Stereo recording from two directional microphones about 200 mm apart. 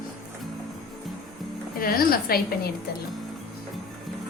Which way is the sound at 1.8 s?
45° left (ahead or behind).